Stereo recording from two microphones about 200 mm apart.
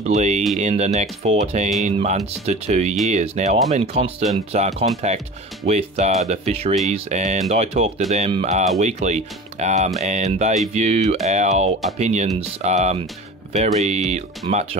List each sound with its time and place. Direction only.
0.0 s speech: 35° right (ahead or behind)